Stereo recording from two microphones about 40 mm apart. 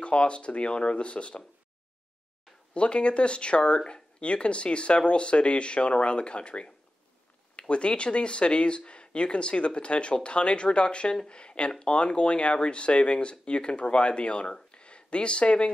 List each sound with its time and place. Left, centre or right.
0.0 s speech: left
2.7 s speech: left